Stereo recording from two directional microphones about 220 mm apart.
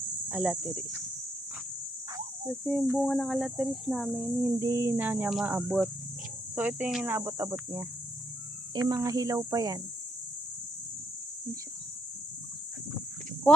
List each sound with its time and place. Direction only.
0.3 s speech: centre (ahead or behind)
2.8 s speech: 10° right (ahead or behind)
3.1 s speech: centre (ahead or behind); by 9.8 s 15° right (ahead or behind)